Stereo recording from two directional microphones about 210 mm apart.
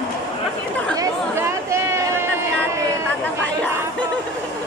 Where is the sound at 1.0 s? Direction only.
15° right (ahead or behind).